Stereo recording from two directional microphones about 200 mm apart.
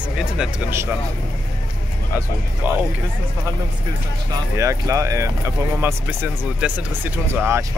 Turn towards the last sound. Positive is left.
turn(degrees=-10)  # may be behind; listen again after turning